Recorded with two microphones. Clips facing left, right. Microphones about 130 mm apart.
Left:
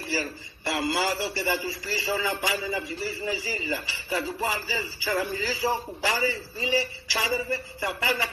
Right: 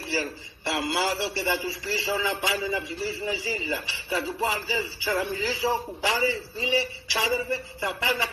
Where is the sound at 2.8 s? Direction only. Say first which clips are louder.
Right 1 dB; 75° right (ahead or behind).